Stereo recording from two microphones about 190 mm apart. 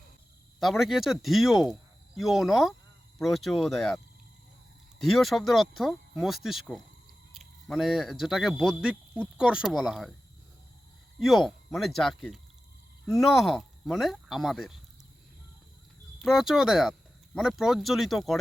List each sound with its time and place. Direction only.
0.6 s speech: centre (ahead or behind)
4.9 s speech: centre (ahead or behind)
11.2 s speech: centre (ahead or behind)
16.1 s speech: centre (ahead or behind)